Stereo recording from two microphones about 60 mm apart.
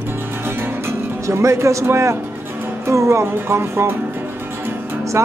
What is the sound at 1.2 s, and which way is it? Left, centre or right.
Music, right.